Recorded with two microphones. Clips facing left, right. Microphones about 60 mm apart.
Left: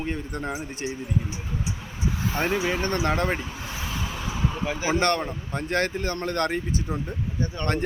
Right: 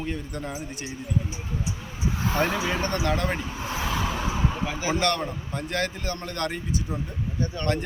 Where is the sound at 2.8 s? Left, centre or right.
Left.